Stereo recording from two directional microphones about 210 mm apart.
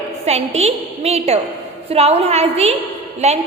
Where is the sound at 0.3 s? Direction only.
30° right (ahead or behind).